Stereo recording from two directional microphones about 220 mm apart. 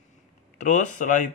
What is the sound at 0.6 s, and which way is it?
Speech, 35° left (ahead or behind).